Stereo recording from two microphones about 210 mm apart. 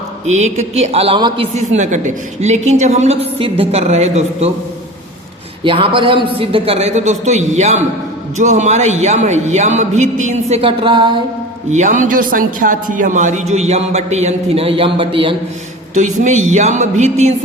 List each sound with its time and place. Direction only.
0.3 s a man's voice: 35° right (ahead or behind)
5.6 s a man's voice: 25° right (ahead or behind)
11.7 s a man's voice: 35° right (ahead or behind)
16.0 s a man's voice: 35° right (ahead or behind)